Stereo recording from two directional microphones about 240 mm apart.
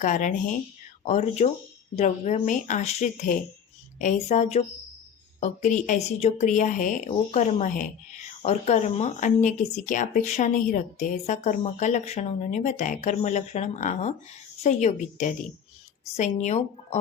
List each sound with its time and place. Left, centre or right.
0.0 s speech: left